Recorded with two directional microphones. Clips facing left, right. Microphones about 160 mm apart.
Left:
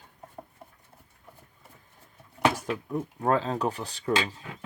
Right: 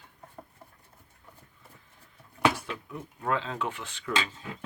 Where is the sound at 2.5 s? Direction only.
40° left (ahead or behind).